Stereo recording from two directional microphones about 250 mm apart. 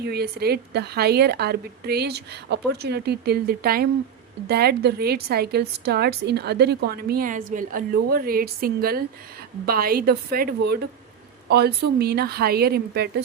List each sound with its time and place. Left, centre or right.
0.0 s a woman's voice: right